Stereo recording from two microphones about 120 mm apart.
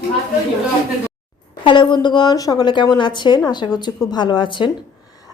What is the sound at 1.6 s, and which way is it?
A woman's voice, 40° left (ahead or behind).